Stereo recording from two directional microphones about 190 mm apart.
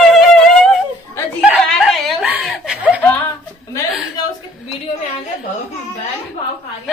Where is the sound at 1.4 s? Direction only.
5° right (ahead or behind).